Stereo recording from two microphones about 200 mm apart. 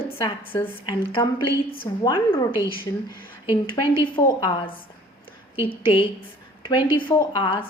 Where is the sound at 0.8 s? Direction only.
25° left (ahead or behind).